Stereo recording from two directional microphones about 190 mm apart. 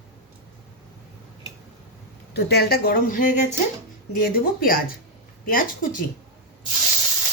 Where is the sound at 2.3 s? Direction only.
55° left (ahead or behind).